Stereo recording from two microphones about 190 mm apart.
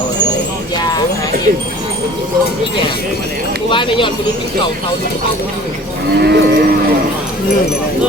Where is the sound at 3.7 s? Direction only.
25° left (ahead or behind).